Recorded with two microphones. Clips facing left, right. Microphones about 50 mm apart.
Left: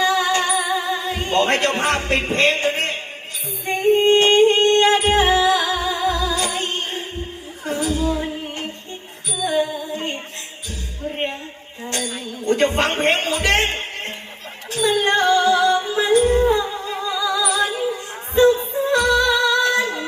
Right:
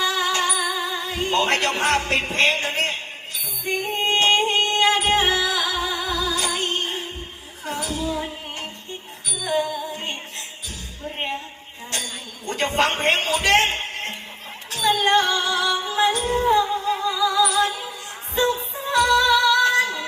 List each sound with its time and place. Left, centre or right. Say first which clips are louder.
0.0 s music: left 4 dB; left
11.9 s a sound: left 5 dB; left
12.6 s speech: even; left
14.7 s music: left 1 dB; left
19.6 s female singing: even; left